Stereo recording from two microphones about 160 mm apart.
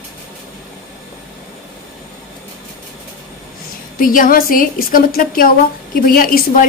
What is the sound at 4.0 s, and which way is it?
A woman's voice, 60° left (ahead or behind).